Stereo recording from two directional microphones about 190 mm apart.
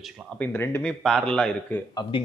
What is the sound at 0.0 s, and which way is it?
Speech, centre (ahead or behind).